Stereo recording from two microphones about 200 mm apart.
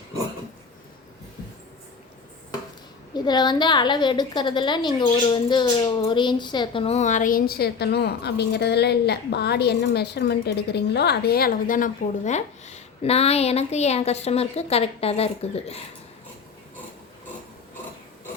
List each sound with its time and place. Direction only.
3.2 s a woman's voice: 20° left (ahead or behind)